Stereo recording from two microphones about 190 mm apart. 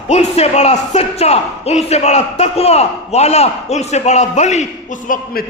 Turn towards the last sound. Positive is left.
turn(degrees=45)  # may be behind; listen again after turning